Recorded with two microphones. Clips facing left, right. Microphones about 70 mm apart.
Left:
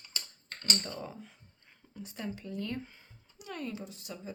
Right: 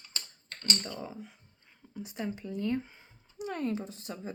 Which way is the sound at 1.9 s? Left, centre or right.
Centre.